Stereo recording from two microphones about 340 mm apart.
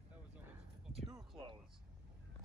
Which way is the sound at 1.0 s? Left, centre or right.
Centre.